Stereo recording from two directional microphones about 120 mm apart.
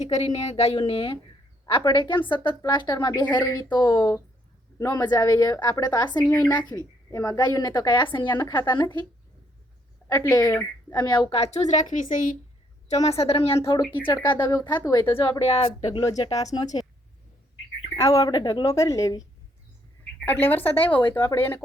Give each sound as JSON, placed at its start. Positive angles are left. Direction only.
{"t": 0.0, "sound": "a woman's voice", "side_deg": 70}
{"t": 10.1, "sound": "a woman's voice", "side_deg": 25}
{"t": 11.3, "sound": "a woman's voice", "side_deg": 55}
{"t": 12.9, "sound": "a woman's voice", "side_deg": 65}
{"t": 14.3, "sound": "a woman's voice", "side_deg": 40}
{"t": 15.4, "sound": "a woman's voice", "side_deg": 55}
{"t": 16.0, "sound": "a woman's voice", "side_deg": 30}
{"t": 17.9, "sound": "a woman's voice", "side_deg": 25}
{"t": 20.2, "sound": "a woman's voice", "side_deg": 15}
{"t": 21.0, "sound": "a woman's voice", "side_deg": 30}
{"t": 21.3, "sound": "a woman's voice", "side_deg": 15}